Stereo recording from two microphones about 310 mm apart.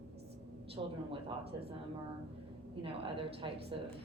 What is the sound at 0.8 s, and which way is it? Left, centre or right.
Speech, centre.